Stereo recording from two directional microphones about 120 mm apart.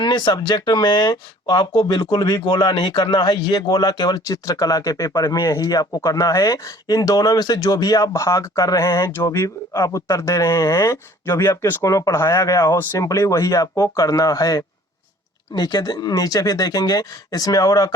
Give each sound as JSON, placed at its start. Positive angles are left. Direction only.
{"t": 0.0, "sound": "speech", "side_deg": 40}